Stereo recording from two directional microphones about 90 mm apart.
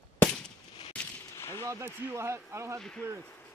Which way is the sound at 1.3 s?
30° left (ahead or behind).